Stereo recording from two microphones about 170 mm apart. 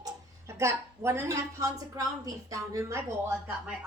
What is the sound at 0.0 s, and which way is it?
A woman's voice, 15° right (ahead or behind).